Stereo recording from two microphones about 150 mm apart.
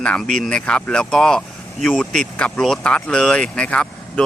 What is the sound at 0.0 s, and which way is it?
Speech, 5° left (ahead or behind).